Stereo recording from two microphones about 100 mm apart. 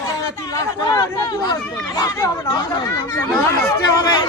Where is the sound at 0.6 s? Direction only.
40° left (ahead or behind).